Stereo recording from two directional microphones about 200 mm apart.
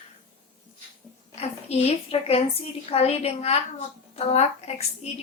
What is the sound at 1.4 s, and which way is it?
A woman's voice, 30° left (ahead or behind).